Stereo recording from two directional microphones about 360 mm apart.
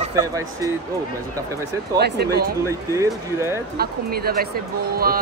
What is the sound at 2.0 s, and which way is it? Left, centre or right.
Speech, right.